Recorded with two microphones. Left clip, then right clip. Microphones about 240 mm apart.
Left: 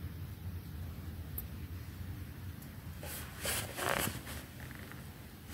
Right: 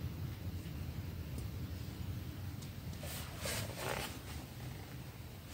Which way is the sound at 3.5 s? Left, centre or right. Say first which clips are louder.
Left 6 dB; left.